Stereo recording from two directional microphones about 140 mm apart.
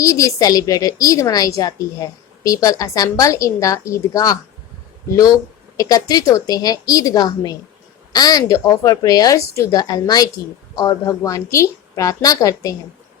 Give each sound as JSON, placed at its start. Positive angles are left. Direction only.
{"t": 0.0, "sound": "a woman's voice", "side_deg": 25}
{"t": 5.7, "sound": "a woman's voice", "side_deg": 25}